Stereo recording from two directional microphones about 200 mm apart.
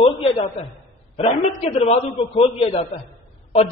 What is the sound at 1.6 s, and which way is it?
Speech, 30° left (ahead or behind).